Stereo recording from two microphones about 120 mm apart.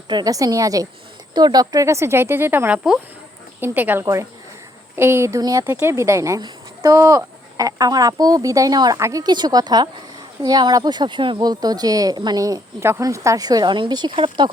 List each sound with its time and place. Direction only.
0.1 s a woman's voice: 35° right (ahead or behind)
9.2 s speech: 35° right (ahead or behind)